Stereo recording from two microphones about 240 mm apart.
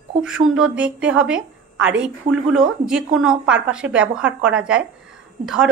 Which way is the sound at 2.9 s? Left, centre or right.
Centre.